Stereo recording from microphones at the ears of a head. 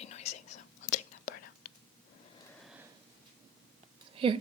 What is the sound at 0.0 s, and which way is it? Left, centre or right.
Whispering, left.